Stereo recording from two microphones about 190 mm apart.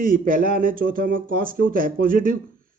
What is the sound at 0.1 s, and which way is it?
Speech, 45° right (ahead or behind).